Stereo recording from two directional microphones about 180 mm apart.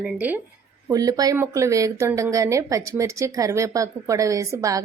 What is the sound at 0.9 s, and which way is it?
A woman's voice, 20° right (ahead or behind).